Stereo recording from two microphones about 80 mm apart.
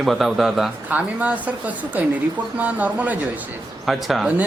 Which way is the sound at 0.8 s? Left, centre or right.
Centre.